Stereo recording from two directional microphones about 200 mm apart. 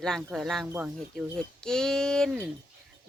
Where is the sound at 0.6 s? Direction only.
10° right (ahead or behind).